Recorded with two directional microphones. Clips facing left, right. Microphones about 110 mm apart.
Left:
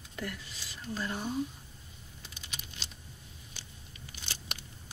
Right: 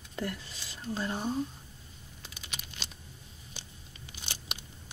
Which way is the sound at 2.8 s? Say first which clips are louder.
Right 3 dB; 70° right (ahead or behind).